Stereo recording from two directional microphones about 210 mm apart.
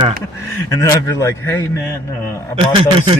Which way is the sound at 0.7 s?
15° left (ahead or behind).